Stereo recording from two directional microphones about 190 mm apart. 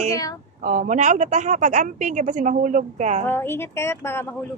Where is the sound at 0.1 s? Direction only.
20° left (ahead or behind).